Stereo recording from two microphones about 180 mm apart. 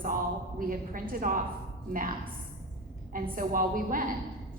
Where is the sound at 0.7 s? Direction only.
50° right (ahead or behind).